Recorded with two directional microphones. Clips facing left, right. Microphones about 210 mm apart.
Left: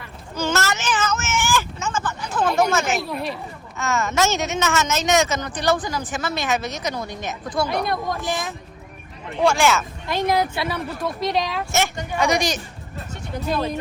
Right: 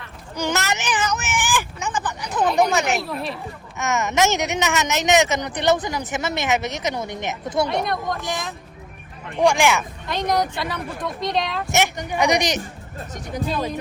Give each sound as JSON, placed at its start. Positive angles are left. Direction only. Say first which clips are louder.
{"t": 0.3, "sound": "a sound", "louder": "left 1 dB", "side_deg": -15}
{"t": 2.6, "sound": "speech", "louder": "right 1 dB", "side_deg": -20}
{"t": 2.9, "sound": "speech", "louder": "even", "side_deg": 0}
{"t": 3.8, "sound": "speech", "louder": "right 1 dB", "side_deg": -20}
{"t": 9.4, "sound": "speech", "louder": "right 1 dB", "side_deg": -15}
{"t": 10.4, "sound": "speech", "louder": "left 2 dB", "side_deg": 5}
{"t": 11.7, "sound": "speech", "louder": "right 3 dB", "side_deg": -20}